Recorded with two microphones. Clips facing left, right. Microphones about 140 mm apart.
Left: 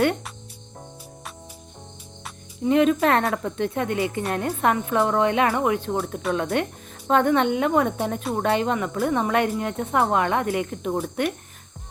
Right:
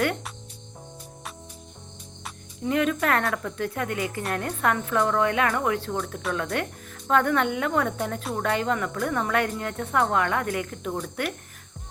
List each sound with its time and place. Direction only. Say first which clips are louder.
2.6 s speech: left 5 dB; 25° left (ahead or behind)